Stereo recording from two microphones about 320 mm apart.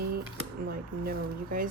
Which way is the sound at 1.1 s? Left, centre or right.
Right.